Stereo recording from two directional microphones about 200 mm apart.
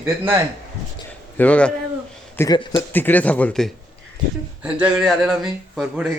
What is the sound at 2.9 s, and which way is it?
Speech, 10° left (ahead or behind).